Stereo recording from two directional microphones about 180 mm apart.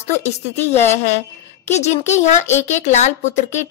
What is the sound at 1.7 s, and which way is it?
A child's voice, 40° left (ahead or behind).